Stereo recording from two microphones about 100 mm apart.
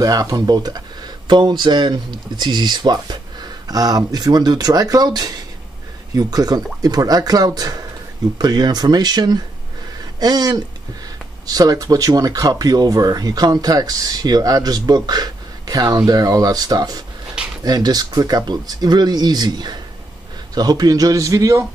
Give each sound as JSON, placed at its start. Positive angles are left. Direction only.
{"t": 0.0, "sound": "speech", "side_deg": -35}